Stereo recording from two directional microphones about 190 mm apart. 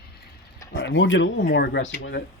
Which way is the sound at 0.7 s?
70° left (ahead or behind).